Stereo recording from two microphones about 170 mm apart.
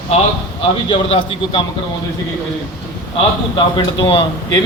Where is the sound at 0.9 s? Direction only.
30° left (ahead or behind).